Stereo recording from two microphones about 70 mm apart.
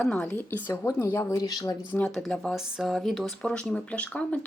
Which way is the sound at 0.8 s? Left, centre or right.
Left.